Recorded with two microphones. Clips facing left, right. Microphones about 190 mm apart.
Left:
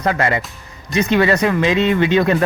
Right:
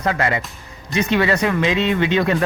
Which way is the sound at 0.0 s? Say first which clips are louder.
Left 2 dB; 40° left (ahead or behind).